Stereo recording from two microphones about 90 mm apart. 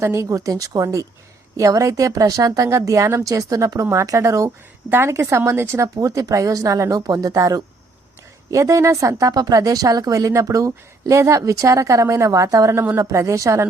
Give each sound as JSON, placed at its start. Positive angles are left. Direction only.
{"t": 0.0, "sound": "a woman's voice", "side_deg": -35}